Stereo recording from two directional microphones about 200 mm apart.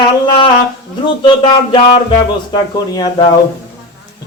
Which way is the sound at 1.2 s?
25° left (ahead or behind).